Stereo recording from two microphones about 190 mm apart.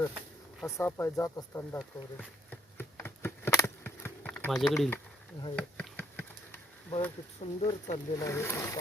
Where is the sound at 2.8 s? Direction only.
10° left (ahead or behind).